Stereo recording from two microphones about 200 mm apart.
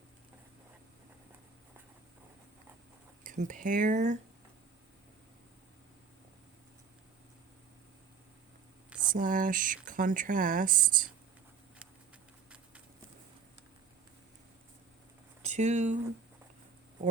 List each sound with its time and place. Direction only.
3.2 s speech: 40° right (ahead or behind)
9.0 s speech: 40° right (ahead or behind)
15.4 s speech: 35° right (ahead or behind)